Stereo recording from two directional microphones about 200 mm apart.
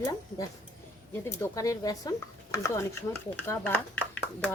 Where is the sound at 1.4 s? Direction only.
15° left (ahead or behind).